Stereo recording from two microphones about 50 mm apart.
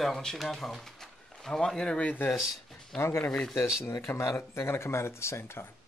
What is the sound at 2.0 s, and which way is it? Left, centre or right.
Speech, left.